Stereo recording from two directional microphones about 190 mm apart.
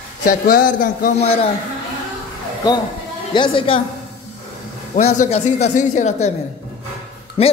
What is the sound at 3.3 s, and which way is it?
Speech, 25° left (ahead or behind).